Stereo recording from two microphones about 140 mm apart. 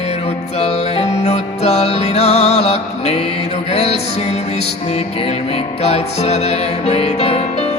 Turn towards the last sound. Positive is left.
turn(degrees=50)  # may be behind; listen again after turning